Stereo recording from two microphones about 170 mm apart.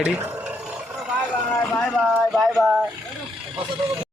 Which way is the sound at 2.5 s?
15° right (ahead or behind).